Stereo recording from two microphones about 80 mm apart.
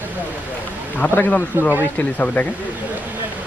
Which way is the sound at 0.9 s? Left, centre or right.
Left.